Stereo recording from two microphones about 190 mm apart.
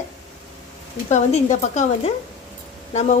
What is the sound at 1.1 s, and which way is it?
A woman's voice, 35° left (ahead or behind).